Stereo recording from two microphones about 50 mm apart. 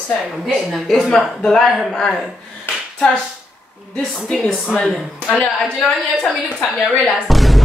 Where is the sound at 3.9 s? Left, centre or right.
Left.